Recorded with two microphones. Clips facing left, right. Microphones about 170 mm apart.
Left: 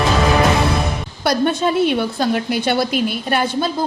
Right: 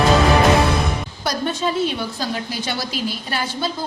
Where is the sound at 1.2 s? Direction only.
60° left (ahead or behind).